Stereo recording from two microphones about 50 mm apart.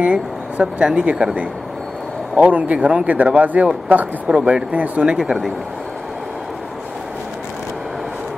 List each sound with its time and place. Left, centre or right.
0.0 s speech: right
4.3 s speech: centre
5.0 s speech: centre